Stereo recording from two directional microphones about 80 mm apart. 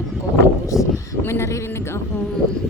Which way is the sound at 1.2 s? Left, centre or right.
Left.